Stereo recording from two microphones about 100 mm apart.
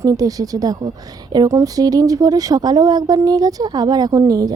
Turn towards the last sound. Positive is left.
turn(degrees=-40)  # may be behind; listen again after turning